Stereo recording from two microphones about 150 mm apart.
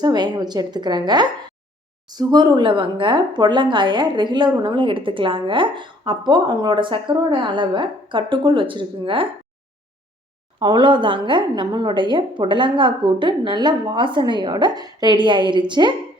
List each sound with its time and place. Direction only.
0.0 s a woman's voice: 30° right (ahead or behind)
10.6 s a woman's voice: 30° right (ahead or behind)